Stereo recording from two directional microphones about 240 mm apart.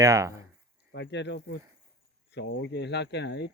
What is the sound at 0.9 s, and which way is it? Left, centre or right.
Speech, left.